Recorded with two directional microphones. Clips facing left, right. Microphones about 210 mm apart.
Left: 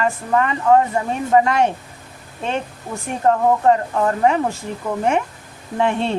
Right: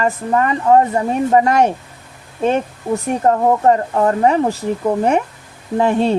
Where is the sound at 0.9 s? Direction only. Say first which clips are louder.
Right 4 dB; 40° right (ahead or behind).